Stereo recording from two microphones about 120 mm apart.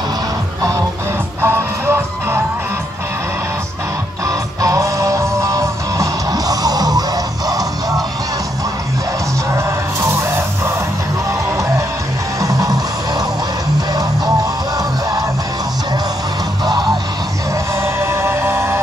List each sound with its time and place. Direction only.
1.4 s music: 20° right (ahead or behind)
4.6 s music: 25° right (ahead or behind)
12.4 s music: 30° right (ahead or behind)
17.8 s music: 20° right (ahead or behind)